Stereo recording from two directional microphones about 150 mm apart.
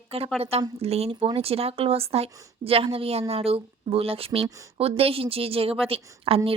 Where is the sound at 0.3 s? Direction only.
45° right (ahead or behind).